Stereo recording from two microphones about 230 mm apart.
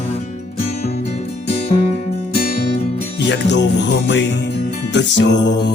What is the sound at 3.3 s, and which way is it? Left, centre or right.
Music, left.